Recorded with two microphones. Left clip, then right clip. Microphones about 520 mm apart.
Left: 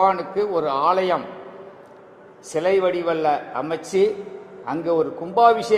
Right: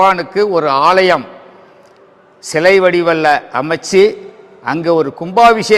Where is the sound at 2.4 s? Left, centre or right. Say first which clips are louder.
Right 10 dB; right.